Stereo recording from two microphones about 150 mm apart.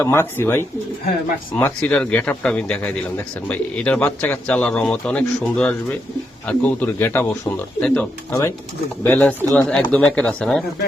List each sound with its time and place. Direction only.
0.0 s speech: 15° left (ahead or behind)